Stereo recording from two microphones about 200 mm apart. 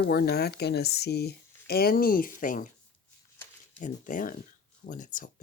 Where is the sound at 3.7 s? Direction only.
40° left (ahead or behind).